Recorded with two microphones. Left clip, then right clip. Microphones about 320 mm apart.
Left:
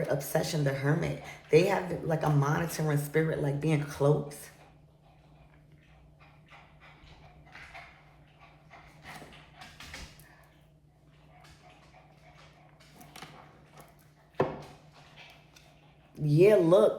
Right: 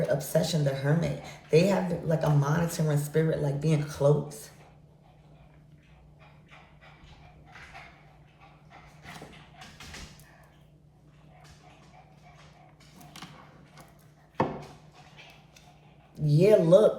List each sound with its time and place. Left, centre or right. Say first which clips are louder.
0.1 s speech: right 3 dB; centre
16.2 s speech: right 1 dB; centre